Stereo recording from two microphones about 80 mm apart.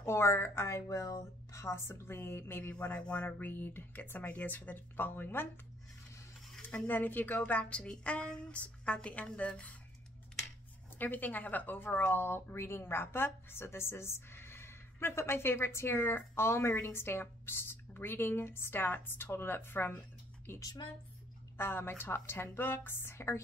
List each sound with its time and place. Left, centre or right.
0.0 s speech: left
2.8 s speech: centre
6.9 s a woman's voice: left
11.0 s speech: left